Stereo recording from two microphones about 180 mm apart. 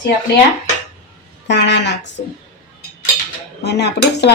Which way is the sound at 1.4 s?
75° left (ahead or behind).